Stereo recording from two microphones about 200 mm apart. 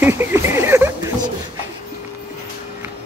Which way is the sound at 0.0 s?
10° right (ahead or behind).